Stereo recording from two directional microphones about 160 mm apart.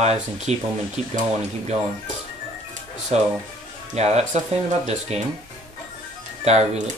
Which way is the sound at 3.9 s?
40° right (ahead or behind).